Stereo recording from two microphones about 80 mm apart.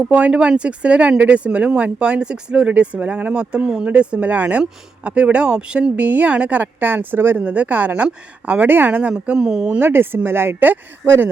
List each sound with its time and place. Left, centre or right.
0.0 s speech: centre
9.8 s speech: right